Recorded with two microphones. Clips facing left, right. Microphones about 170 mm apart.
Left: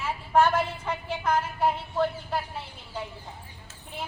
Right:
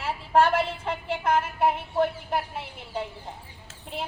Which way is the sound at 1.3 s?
25° right (ahead or behind).